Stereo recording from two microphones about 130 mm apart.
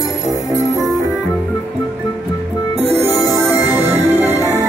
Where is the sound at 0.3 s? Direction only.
25° left (ahead or behind).